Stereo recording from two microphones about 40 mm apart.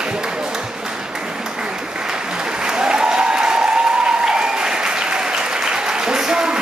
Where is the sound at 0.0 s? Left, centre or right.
Right.